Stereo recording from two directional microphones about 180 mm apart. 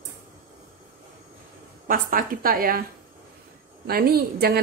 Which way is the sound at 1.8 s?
50° right (ahead or behind).